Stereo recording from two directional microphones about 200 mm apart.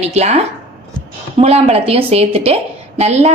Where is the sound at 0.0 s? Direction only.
35° right (ahead or behind).